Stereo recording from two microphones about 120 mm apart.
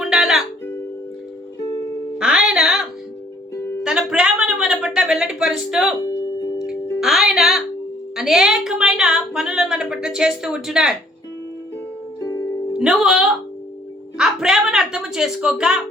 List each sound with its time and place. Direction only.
0.0 s music: 5° right (ahead or behind)
2.1 s music: 5° right (ahead or behind)
3.5 s music: 20° left (ahead or behind)
3.8 s a sound: 5° right (ahead or behind)
6.1 s music: 30° left (ahead or behind)
7.0 s music: 5° right (ahead or behind)
8.1 s speech: 5° right (ahead or behind)
12.2 s music: 25° left (ahead or behind)
12.7 s speech: 5° right (ahead or behind)